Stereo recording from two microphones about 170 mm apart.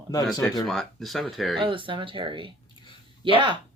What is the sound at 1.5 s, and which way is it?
Speech, 30° right (ahead or behind).